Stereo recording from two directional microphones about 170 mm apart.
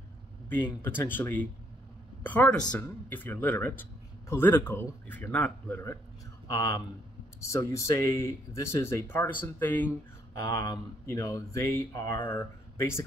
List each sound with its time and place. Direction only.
0.5 s speech: 10° left (ahead or behind)